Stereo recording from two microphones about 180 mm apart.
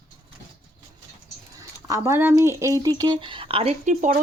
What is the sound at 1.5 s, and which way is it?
Speech, 15° right (ahead or behind).